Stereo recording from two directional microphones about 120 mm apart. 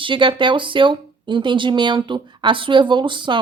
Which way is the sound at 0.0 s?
45° right (ahead or behind).